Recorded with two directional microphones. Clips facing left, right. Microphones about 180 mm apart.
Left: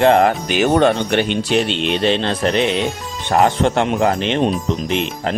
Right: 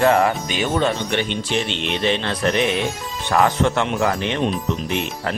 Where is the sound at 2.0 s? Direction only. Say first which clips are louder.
Left 2 dB; 30° left (ahead or behind).